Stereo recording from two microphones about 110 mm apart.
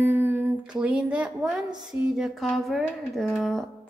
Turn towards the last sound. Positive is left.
turn(degrees=0)  # may be behind; listen again after turning